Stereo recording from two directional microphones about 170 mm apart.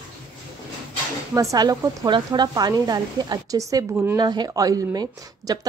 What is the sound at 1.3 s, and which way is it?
A woman's voice, 20° right (ahead or behind).